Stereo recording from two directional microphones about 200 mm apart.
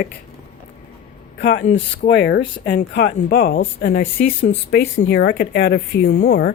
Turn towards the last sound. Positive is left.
turn(degrees=55)  # may be behind; listen again after turning